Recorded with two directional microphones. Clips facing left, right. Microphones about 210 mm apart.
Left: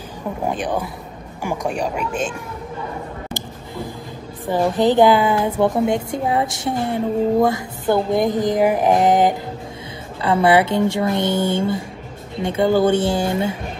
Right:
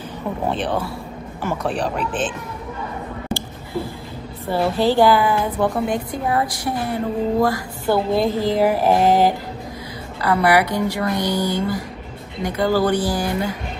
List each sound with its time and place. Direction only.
0.5 s speech: 15° left (ahead or behind)
4.5 s a woman's voice: 15° left (ahead or behind)